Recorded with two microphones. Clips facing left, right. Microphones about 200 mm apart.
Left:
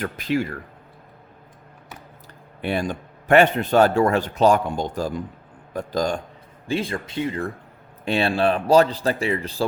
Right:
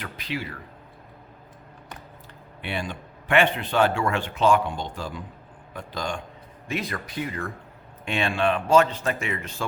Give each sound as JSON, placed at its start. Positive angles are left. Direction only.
{"t": 0.0, "sound": "speech", "side_deg": 45}
{"t": 2.6, "sound": "speech", "side_deg": 40}
{"t": 6.7, "sound": "speech", "side_deg": 30}